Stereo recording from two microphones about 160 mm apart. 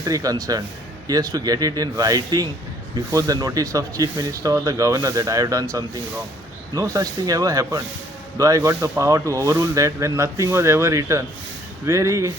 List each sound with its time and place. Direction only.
0.0 s speech: 20° right (ahead or behind)